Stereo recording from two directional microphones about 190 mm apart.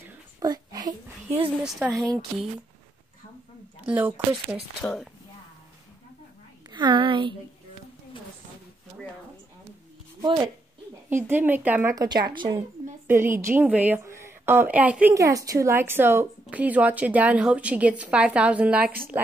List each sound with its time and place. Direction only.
0.4 s a sound: 20° right (ahead or behind)
1.6 s speech: 5° right (ahead or behind)
3.8 s speech: 5° right (ahead or behind)
6.7 s a woman's voice: 25° right (ahead or behind)
10.2 s speech: 25° right (ahead or behind)
11.1 s speech: 10° right (ahead or behind)